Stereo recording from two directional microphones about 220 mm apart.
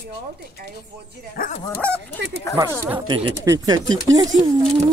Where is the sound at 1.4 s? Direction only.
40° left (ahead or behind).